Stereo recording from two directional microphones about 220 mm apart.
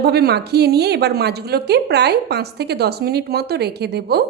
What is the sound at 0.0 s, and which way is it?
A woman's voice, 45° right (ahead or behind).